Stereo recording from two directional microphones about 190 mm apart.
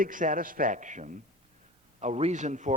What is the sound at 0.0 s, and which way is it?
A man's voice, 45° right (ahead or behind).